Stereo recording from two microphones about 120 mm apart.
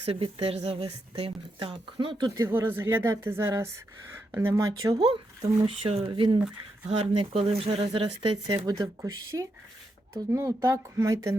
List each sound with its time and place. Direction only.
0.0 s a woman's voice: 50° right (ahead or behind)
2.4 s speech: 20° right (ahead or behind)
4.5 s speech: 35° right (ahead or behind)
5.0 s a woman's voice: 45° right (ahead or behind)
6.1 s speech: 40° right (ahead or behind)
6.8 s speech: 55° right (ahead or behind)
8.4 s speech: 30° right (ahead or behind)